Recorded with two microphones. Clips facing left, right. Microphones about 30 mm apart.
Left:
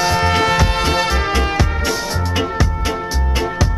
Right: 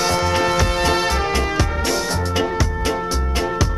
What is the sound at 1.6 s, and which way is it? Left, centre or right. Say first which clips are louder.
Music: left 1 dB; centre.